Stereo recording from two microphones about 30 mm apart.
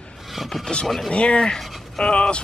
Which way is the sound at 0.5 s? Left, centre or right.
Centre.